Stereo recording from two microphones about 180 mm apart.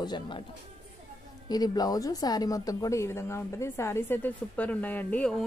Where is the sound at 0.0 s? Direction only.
25° left (ahead or behind).